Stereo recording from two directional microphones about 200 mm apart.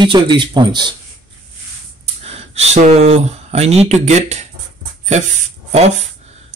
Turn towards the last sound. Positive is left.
turn(degrees=-35)  # may be behind; listen again after turning